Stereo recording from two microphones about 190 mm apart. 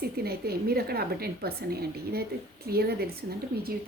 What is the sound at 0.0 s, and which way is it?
A woman's voice, 55° right (ahead or behind).